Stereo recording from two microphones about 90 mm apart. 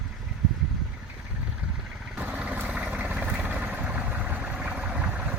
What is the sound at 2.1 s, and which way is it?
Vehicle, 15° right (ahead or behind).